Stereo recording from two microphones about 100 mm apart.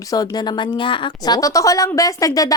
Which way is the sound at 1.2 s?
40° left (ahead or behind).